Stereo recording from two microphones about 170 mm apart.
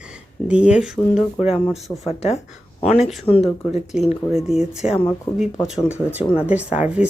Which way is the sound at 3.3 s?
10° left (ahead or behind).